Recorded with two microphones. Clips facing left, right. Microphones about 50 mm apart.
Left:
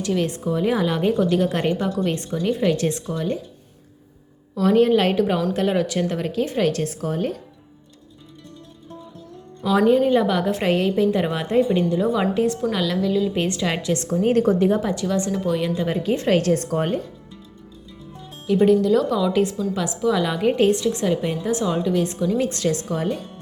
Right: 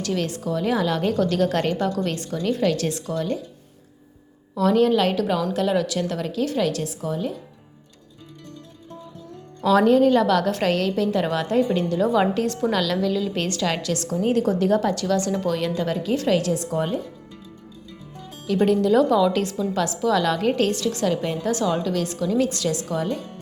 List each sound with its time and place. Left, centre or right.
0.3 s a woman's voice: left
4.6 s a woman's voice: left
9.6 s a woman's voice: centre
11.9 s a woman's voice: centre; by 14.8 s left
14.8 s a woman's voice: centre
15.3 s a woman's voice: centre
16.0 s a woman's voice: left
18.6 s a woman's voice: centre
22.4 s a woman's voice: left